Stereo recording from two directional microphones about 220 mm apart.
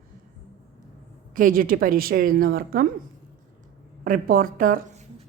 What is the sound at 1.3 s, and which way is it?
A woman's voice, 40° right (ahead or behind).